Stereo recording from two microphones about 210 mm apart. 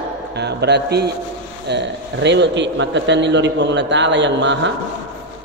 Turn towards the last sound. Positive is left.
turn(degrees=-60)  # may be behind; listen again after turning